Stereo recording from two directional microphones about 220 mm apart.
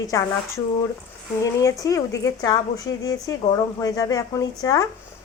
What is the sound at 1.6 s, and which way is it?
A woman's voice, 15° left (ahead or behind).